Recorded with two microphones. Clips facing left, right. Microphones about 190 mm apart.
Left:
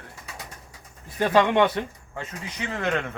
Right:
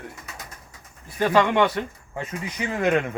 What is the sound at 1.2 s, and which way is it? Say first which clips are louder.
Speech: even; 20° left (ahead or behind).